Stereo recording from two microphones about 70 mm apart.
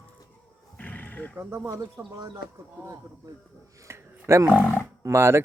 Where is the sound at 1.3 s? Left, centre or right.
Right.